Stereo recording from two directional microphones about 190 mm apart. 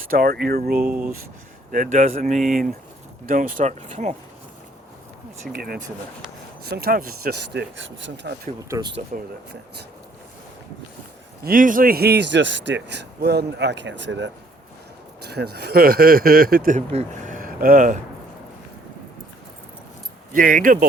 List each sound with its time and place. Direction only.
0.1 s speech: 50° right (ahead or behind)
0.9 s speech: 5° right (ahead or behind)
1.7 s speech: 45° right (ahead or behind)
2.4 s speech: centre (ahead or behind)
3.2 s speech: 45° right (ahead or behind)
5.5 s a man's voice: 50° right (ahead or behind)
11.4 s a man's voice: 45° right (ahead or behind); by 14.3 s 70° right (ahead or behind)
15.2 s speech: 60° right (ahead or behind)
20.3 s speech: 45° right (ahead or behind)